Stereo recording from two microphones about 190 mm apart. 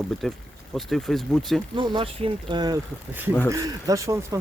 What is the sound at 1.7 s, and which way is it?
Speech, 30° right (ahead or behind).